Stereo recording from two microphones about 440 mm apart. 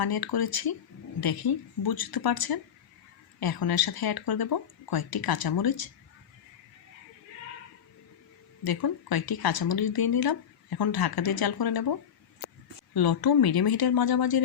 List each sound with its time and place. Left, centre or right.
0.0 s speech: left
8.6 s speech: left